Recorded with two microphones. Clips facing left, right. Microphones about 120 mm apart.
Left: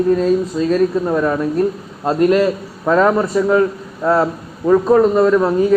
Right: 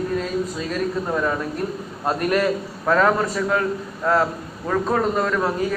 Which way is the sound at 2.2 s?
20° left (ahead or behind).